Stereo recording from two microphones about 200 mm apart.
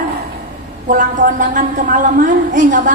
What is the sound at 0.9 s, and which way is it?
A woman's voice, 40° right (ahead or behind).